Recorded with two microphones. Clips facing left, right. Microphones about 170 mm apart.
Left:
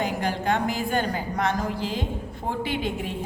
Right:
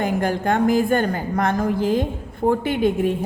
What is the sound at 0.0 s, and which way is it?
A woman's voice, 50° right (ahead or behind).